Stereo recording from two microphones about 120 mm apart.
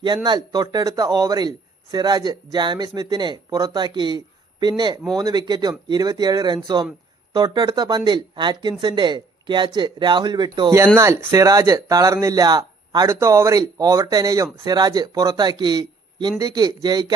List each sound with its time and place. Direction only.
0.0 s a man's voice: 35° right (ahead or behind)